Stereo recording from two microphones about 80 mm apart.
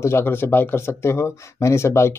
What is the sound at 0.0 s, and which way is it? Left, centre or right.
Speech, left.